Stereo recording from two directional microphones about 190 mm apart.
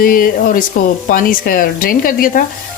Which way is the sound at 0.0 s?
50° left (ahead or behind).